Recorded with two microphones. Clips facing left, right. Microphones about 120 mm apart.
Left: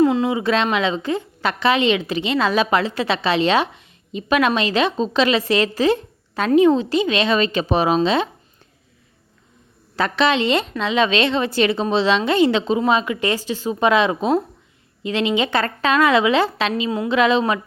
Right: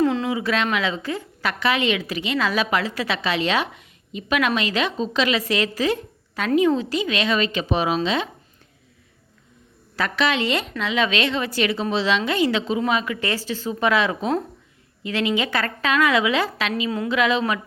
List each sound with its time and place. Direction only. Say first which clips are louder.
0.0 s a sound: left 4 dB; 15° left (ahead or behind)
0.3 s a woman's voice: left 4 dB; 25° left (ahead or behind)
9.9 s a woman's voice: left 4 dB; 25° left (ahead or behind)